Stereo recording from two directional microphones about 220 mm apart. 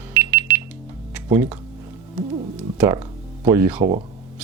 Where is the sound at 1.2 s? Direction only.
10° right (ahead or behind).